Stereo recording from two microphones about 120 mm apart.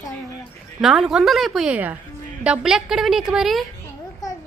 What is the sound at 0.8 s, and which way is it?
A woman's voice, 5° right (ahead or behind).